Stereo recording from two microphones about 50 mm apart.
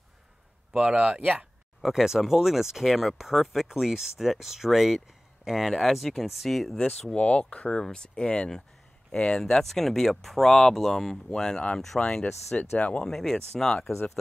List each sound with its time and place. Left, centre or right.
0.7 s speech: centre
7.2 s speech: left
12.0 s speech: centre
13.0 s speech: centre